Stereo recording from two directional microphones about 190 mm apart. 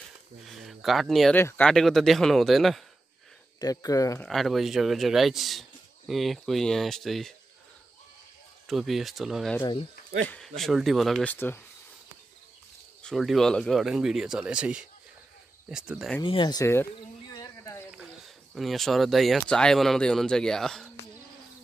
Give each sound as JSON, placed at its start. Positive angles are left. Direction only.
{"t": 0.5, "sound": "a sound", "side_deg": 0}
{"t": 1.4, "sound": "speech", "side_deg": 5}
{"t": 3.6, "sound": "speech", "side_deg": 20}
{"t": 4.3, "sound": "speech", "side_deg": 0}
{"t": 8.6, "sound": "speech", "side_deg": 0}
{"t": 9.6, "sound": "speech", "side_deg": 25}
{"t": 10.2, "sound": "speech", "side_deg": 5}
{"t": 11.3, "sound": "speech", "side_deg": 10}
{"t": 13.0, "sound": "speech", "side_deg": 0}
{"t": 16.2, "sound": "speech", "side_deg": 25}
{"t": 17.3, "sound": "a sound", "side_deg": 15}
{"t": 17.9, "sound": "speech", "side_deg": 0}